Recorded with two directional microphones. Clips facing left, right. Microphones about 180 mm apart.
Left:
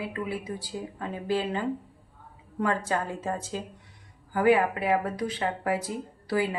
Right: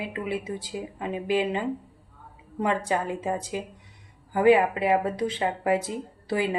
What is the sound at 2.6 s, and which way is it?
Speech, 15° right (ahead or behind).